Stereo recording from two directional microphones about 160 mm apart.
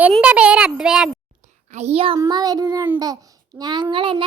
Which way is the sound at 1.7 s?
40° right (ahead or behind).